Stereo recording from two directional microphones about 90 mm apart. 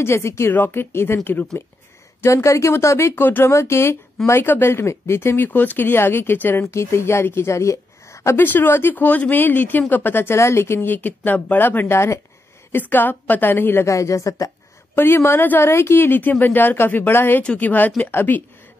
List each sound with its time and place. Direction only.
0.0 s a woman's voice: 30° left (ahead or behind)
2.2 s a woman's voice: 35° left (ahead or behind)
15.0 s a woman's voice: 25° left (ahead or behind)